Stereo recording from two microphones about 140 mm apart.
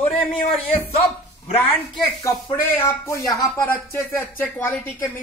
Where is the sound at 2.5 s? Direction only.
15° left (ahead or behind).